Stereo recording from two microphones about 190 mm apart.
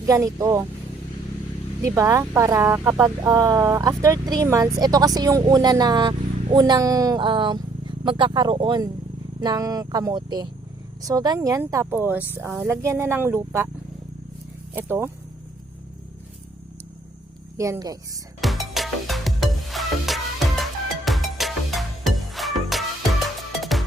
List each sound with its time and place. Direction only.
0.0 s speech: 15° right (ahead or behind)
1.8 s speech: 15° right (ahead or behind)
14.8 s speech: 10° right (ahead or behind)
17.6 s speech: 20° right (ahead or behind)
18.3 s music: centre (ahead or behind)